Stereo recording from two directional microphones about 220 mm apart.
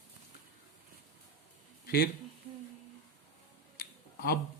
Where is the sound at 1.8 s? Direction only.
45° left (ahead or behind).